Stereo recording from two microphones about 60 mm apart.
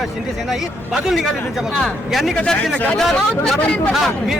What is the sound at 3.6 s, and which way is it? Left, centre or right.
Speech, left.